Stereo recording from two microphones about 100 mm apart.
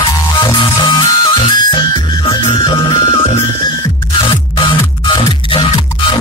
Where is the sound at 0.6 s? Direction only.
45° left (ahead or behind).